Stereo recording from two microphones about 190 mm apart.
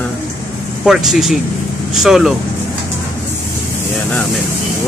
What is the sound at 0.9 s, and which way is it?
Speech, centre (ahead or behind).